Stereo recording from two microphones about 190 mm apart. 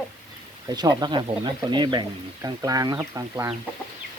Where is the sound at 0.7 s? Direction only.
20° right (ahead or behind).